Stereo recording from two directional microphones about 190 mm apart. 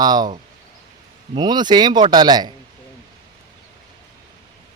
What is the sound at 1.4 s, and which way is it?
Speech, 20° right (ahead or behind).